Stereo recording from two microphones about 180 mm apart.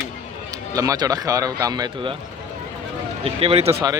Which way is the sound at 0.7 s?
20° right (ahead or behind).